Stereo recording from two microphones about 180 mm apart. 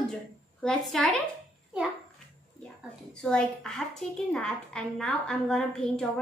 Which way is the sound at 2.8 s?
5° left (ahead or behind).